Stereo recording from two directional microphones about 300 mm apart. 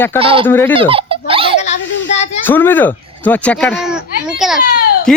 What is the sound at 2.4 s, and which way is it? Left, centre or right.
Speech, centre.